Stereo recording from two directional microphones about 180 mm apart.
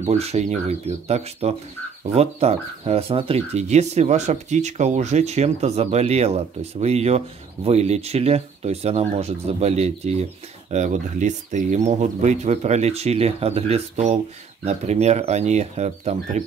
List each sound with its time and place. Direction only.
0.0 s speech: 35° right (ahead or behind)